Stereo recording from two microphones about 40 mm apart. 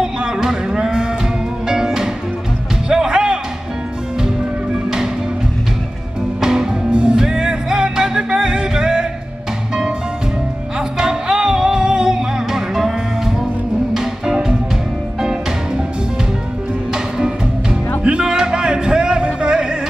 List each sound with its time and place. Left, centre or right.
0.0 s cattle: centre
2.9 s music: centre
6.4 s music: centre
10.8 s music: centre
16.9 s music: centre